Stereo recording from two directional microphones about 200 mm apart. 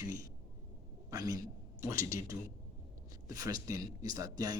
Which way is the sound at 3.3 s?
20° right (ahead or behind).